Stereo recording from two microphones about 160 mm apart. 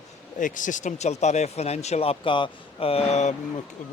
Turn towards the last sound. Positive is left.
turn(degrees=45)  # may be behind; listen again after turning